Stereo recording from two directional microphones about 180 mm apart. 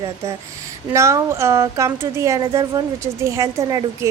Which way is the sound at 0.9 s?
15° right (ahead or behind).